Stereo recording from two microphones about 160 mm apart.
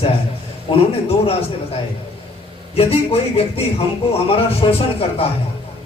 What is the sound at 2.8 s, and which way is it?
A man's voice, 40° left (ahead or behind).